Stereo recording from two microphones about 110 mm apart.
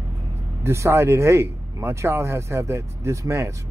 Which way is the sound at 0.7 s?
25° right (ahead or behind).